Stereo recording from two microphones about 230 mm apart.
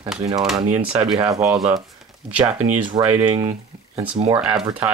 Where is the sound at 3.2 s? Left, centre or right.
Right.